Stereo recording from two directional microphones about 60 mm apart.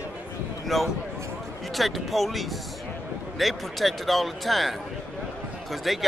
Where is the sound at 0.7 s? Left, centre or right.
Centre.